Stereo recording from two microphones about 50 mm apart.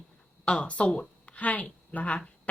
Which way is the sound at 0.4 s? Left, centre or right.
Left.